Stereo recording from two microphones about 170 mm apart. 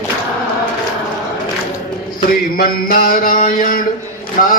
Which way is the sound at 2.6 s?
60° left (ahead or behind).